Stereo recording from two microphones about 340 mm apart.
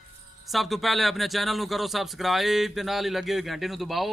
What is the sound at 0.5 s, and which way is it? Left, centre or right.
Speech, centre.